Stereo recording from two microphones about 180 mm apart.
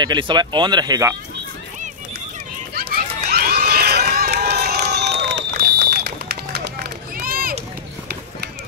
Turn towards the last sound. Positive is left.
turn(degrees=-55)  # may be behind; listen again after turning